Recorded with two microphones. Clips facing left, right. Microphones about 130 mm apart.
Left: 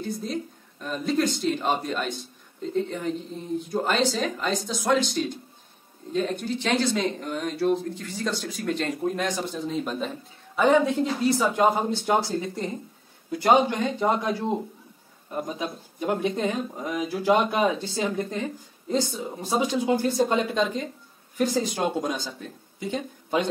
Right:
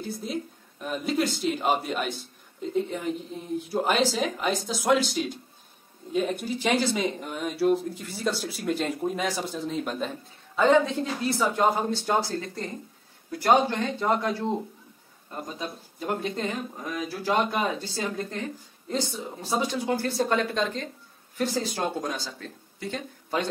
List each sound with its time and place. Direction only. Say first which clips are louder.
0.0 s speech: left 2 dB; 10° right (ahead or behind); by 23.5 s 15° left (ahead or behind)